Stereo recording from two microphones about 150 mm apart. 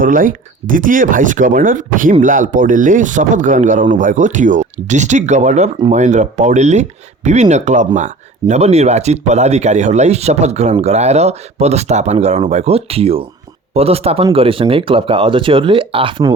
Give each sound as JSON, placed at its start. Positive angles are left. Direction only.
{"t": 0.0, "sound": "speech", "side_deg": -65}